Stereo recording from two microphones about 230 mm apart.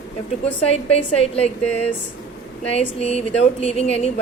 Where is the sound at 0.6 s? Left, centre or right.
Left.